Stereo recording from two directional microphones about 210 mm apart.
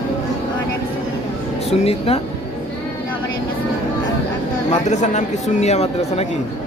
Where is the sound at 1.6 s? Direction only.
30° left (ahead or behind).